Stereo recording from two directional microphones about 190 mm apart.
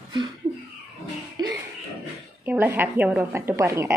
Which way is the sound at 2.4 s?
10° right (ahead or behind).